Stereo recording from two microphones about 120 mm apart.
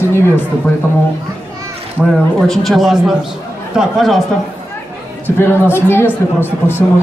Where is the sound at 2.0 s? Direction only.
10° right (ahead or behind).